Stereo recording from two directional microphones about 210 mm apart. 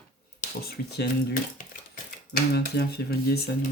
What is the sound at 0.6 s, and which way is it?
Speech, 45° left (ahead or behind).